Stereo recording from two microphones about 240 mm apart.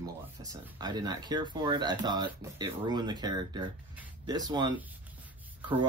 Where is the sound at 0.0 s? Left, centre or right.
Centre.